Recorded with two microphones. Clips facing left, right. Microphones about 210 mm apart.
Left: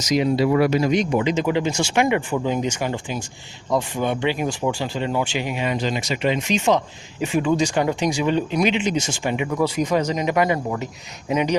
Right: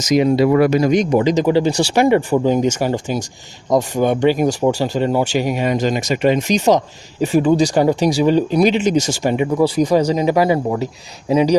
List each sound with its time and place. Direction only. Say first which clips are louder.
0.0 s speech: right 5 dB; 50° right (ahead or behind); by 11.5 s 30° right (ahead or behind)